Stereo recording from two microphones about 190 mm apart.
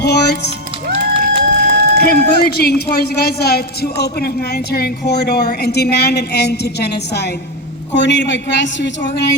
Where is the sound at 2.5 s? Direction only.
55° left (ahead or behind).